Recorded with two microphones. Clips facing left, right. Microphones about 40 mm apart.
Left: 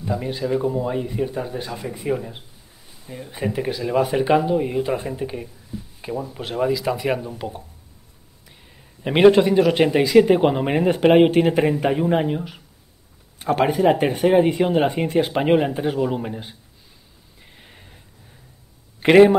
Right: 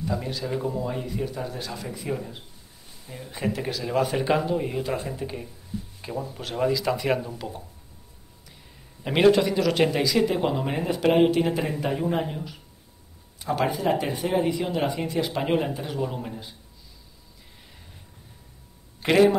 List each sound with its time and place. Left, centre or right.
0.0 s speech: centre
2.9 s speech: centre
4.8 s speech: left
5.9 s speech: centre
9.1 s speech: left
9.7 s speech: centre
10.0 s speech: left
13.4 s speech: left
17.6 s a sound: left
18.9 s a man's voice: left